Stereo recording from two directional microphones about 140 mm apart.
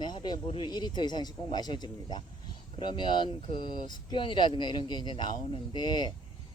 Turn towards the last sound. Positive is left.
turn(degrees=30)  # may be behind; listen again after turning